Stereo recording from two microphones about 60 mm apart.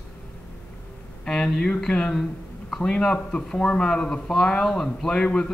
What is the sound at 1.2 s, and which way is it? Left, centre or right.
A man's voice, centre.